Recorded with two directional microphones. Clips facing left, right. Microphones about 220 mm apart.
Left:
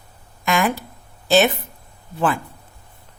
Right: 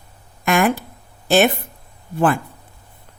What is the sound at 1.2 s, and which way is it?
Speech, 55° right (ahead or behind).